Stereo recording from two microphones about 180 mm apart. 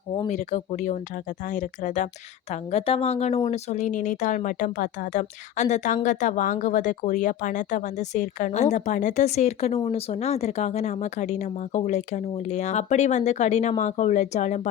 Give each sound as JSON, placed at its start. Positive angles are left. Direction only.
{"t": 0.3, "sound": "speech", "side_deg": 40}